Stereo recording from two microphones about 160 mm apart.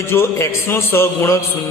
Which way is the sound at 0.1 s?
15° left (ahead or behind).